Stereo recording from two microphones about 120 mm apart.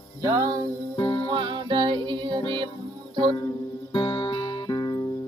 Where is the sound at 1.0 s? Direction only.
45° left (ahead or behind).